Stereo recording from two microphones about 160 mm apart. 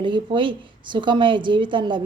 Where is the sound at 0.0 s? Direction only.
30° right (ahead or behind).